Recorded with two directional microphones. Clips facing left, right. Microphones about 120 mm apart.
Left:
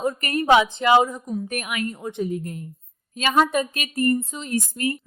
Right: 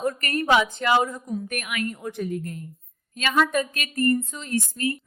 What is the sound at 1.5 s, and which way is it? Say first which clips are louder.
A woman's voice: left 2 dB; 35° left (ahead or behind).